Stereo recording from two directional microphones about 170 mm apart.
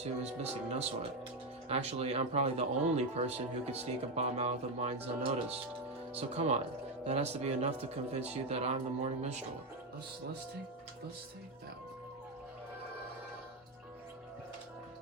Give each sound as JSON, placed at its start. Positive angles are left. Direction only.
{"t": 0.0, "sound": "speech", "side_deg": -40}